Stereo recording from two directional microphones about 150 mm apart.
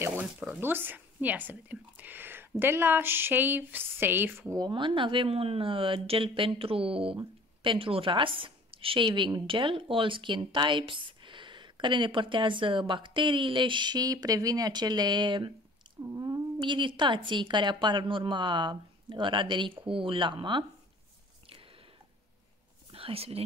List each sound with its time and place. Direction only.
0.2 s speech: 10° right (ahead or behind)
2.6 s a sound: 15° right (ahead or behind); by 20.6 s 30° right (ahead or behind)
22.8 s speech: 40° right (ahead or behind)